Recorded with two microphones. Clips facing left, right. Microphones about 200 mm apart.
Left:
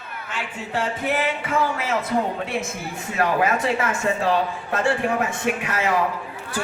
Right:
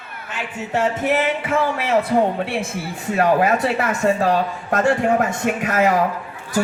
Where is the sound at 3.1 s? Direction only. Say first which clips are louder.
Right 4 dB; 35° right (ahead or behind).